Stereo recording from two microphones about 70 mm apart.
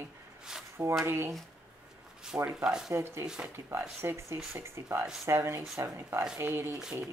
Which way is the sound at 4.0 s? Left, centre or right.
Right.